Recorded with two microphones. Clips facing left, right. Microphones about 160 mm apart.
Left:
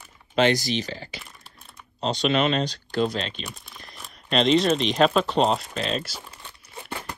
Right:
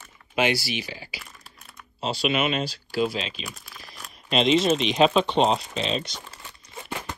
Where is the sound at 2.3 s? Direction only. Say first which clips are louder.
Left 3 dB; 40° left (ahead or behind).